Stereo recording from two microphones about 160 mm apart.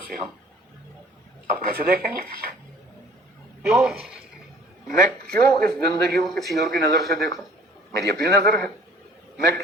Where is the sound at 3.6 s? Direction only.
5° right (ahead or behind).